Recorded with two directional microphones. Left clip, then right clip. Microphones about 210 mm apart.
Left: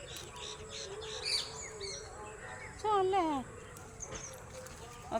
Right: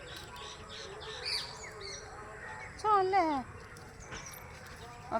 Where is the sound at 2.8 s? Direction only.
20° right (ahead or behind).